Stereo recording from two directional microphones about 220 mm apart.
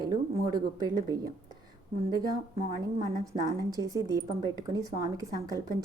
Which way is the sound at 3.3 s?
15° right (ahead or behind).